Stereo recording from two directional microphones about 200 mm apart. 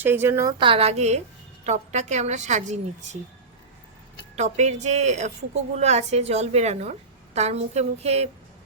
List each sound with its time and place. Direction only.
0.0 s a woman's voice: 10° right (ahead or behind)
0.6 s a woman's voice: 30° right (ahead or behind)
4.4 s a woman's voice: 35° right (ahead or behind)